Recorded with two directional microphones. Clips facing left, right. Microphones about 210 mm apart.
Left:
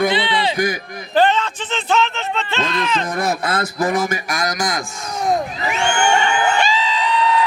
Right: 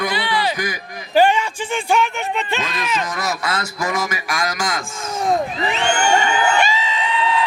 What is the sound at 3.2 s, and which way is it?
Speech, 55° left (ahead or behind).